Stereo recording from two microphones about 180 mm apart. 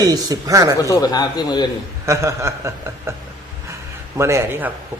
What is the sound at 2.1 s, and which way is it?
A man's voice, 15° right (ahead or behind).